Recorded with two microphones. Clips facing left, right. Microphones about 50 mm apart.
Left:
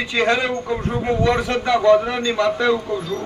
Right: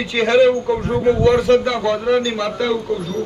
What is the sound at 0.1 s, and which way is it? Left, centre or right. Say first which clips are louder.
Speech: right 7 dB; centre.